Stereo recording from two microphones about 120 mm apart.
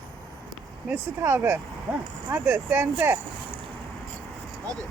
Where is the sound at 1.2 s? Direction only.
20° right (ahead or behind).